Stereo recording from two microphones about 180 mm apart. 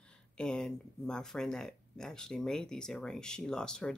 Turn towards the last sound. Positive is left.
turn(degrees=5)  # may be behind; listen again after turning